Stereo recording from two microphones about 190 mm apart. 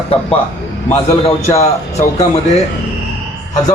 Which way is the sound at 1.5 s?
15° left (ahead or behind).